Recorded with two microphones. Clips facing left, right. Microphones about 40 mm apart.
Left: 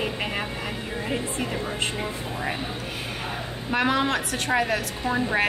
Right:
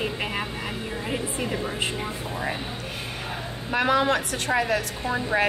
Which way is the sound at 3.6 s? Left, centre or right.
Centre.